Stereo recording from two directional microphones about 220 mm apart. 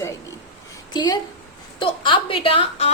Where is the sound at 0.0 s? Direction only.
15° left (ahead or behind).